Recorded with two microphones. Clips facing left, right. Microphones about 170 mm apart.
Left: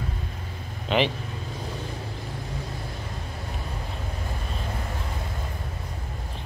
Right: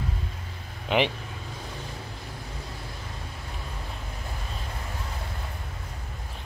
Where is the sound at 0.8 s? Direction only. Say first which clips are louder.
Left 1 dB; 15° right (ahead or behind).